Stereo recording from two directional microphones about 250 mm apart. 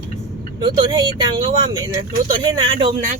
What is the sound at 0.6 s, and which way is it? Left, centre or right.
Speech, centre.